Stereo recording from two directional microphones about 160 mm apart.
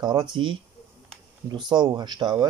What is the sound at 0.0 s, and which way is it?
Speech, 30° right (ahead or behind).